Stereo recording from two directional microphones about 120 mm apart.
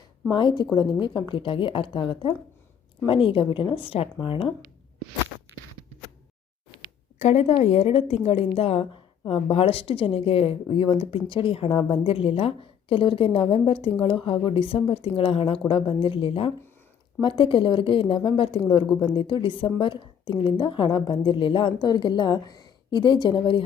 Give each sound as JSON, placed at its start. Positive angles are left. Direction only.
{"t": 0.3, "sound": "a woman's voice", "side_deg": 40}
{"t": 7.2, "sound": "a woman's voice", "side_deg": 65}